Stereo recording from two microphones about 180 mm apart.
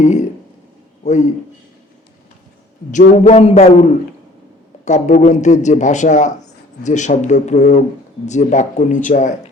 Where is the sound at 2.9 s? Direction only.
40° left (ahead or behind).